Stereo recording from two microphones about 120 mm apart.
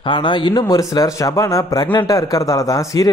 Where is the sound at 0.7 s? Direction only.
30° left (ahead or behind).